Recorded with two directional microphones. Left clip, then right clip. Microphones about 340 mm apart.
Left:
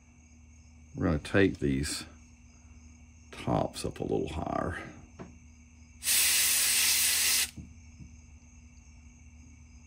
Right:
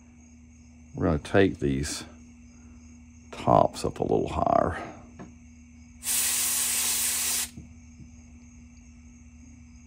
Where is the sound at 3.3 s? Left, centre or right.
Centre.